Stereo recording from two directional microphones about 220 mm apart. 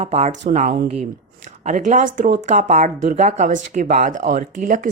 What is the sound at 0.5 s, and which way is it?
Speech, 40° right (ahead or behind).